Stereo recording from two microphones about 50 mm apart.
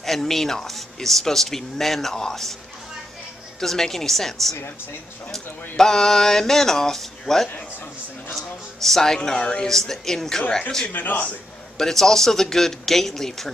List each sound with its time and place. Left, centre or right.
0.0 s speech: centre
3.6 s speech: centre
10.9 s a man's voice: left
11.8 s speech: centre